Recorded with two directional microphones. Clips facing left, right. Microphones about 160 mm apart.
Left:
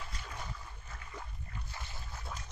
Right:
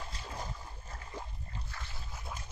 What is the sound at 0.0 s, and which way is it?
Boat, 30° right (ahead or behind).